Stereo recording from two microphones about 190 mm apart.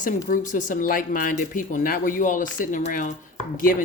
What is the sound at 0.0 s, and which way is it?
Speech, 45° left (ahead or behind).